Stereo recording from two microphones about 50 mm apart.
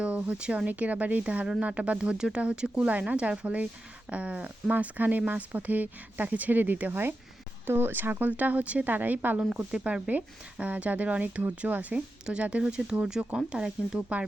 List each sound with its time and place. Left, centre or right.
0.0 s speech: right
4.7 s speech: right
7.7 s speech: right
8.3 s speech: right
11.9 s speech: centre